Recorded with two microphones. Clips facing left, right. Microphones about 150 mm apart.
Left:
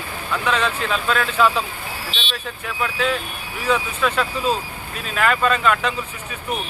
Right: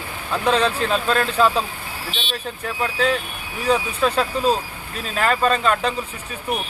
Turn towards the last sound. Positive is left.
turn(degrees=-35)  # may be behind; listen again after turning